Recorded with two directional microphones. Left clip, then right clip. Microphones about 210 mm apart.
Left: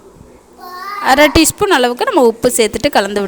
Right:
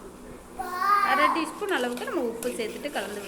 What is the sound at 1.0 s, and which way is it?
A woman's voice, 60° left (ahead or behind).